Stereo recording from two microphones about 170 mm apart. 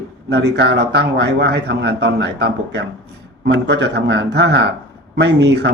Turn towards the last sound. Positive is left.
turn(degrees=-85)